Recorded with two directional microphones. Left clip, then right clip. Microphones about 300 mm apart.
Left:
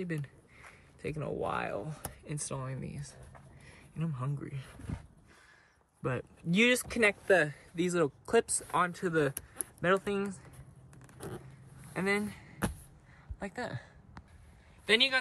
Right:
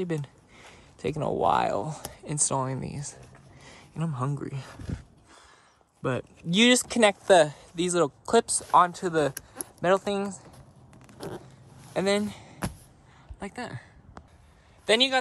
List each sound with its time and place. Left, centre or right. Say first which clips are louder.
0.0 s speech: right 8 dB; centre
6.0 s speech: right 6 dB; centre
11.9 s a sound: right 6 dB; centre
13.4 s a woman's voice: right 2 dB; centre
14.9 s speech: right 4 dB; centre